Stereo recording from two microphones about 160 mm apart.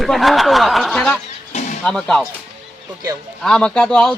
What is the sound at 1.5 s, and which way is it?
Music, 45° left (ahead or behind).